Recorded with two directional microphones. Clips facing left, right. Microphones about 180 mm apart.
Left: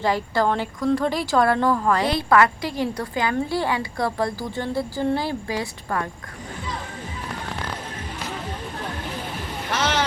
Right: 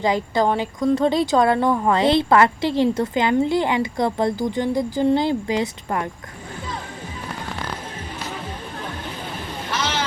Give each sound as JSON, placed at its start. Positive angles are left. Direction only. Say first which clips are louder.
{"t": 0.0, "sound": "speech", "louder": "right 2 dB", "side_deg": -20}